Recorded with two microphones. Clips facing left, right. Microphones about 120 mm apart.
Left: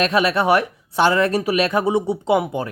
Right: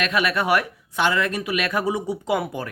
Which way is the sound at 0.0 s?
30° left (ahead or behind).